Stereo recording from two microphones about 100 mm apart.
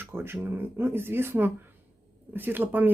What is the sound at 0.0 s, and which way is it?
Speech, 20° right (ahead or behind).